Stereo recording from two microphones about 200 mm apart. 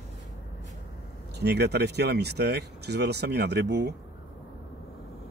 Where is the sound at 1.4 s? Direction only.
55° right (ahead or behind).